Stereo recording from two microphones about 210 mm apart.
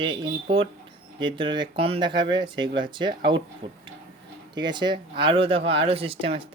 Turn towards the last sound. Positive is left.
turn(degrees=-25)  # may be behind; listen again after turning